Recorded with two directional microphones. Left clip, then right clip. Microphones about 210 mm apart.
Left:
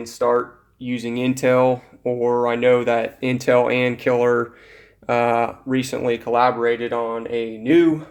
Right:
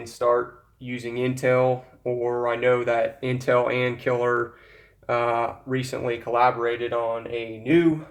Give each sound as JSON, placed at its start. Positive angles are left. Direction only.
{"t": 0.8, "sound": "speech", "side_deg": 45}